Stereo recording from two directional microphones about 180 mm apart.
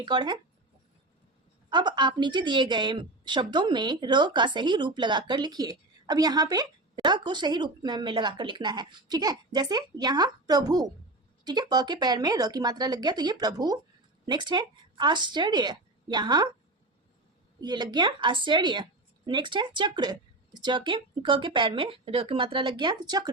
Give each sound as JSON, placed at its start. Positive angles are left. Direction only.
{"t": 0.0, "sound": "a woman's voice", "side_deg": -25}
{"t": 1.7, "sound": "a woman's voice", "side_deg": -25}
{"t": 17.6, "sound": "a woman's voice", "side_deg": -25}